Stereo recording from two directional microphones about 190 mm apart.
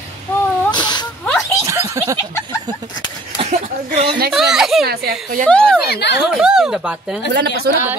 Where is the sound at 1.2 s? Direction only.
10° left (ahead or behind).